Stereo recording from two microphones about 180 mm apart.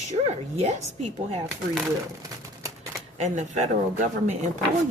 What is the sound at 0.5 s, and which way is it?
Speech, 35° right (ahead or behind).